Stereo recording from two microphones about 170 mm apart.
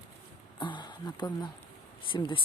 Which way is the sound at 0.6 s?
25° left (ahead or behind).